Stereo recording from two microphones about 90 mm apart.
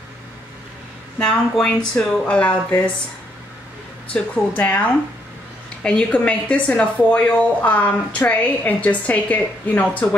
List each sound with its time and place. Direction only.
1.2 s speech: 5° left (ahead or behind)
4.1 s speech: 15° left (ahead or behind)